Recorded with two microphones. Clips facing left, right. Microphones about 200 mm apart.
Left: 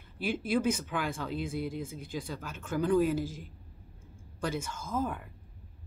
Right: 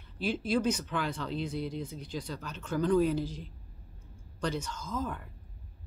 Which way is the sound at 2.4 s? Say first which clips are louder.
Right 1 dB; 10° left (ahead or behind).